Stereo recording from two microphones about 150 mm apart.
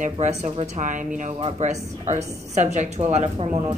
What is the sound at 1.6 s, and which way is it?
A woman's voice, 50° right (ahead or behind).